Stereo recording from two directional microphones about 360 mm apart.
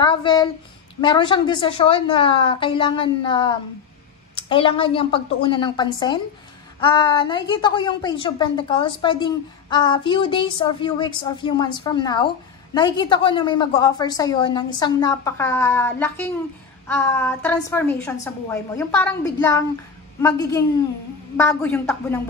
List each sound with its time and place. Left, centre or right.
0.0 s a woman's voice: centre